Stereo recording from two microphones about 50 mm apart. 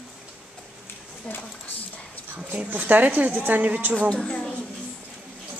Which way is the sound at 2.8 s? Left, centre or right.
Right.